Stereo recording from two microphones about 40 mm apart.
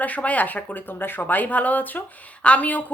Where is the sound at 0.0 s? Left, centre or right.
Left.